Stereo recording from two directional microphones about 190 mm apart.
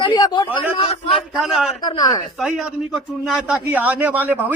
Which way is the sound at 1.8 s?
20° left (ahead or behind).